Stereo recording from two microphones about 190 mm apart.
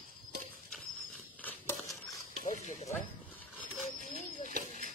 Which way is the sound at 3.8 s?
40° left (ahead or behind).